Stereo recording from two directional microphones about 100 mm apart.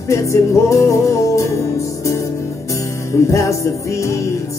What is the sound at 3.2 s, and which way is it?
Jingle bell, 30° left (ahead or behind).